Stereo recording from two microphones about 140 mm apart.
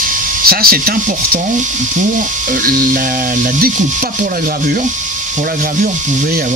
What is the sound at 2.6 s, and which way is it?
Speech, 80° right.